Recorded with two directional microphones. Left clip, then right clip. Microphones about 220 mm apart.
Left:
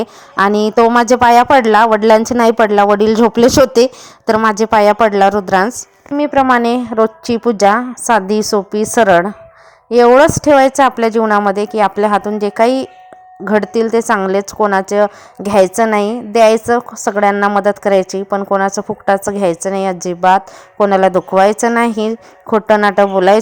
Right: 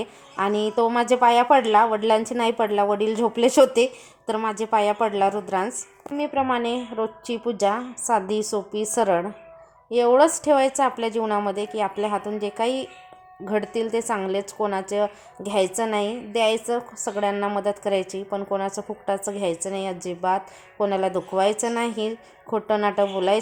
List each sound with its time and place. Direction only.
0.0 s a woman's voice: 40° left (ahead or behind)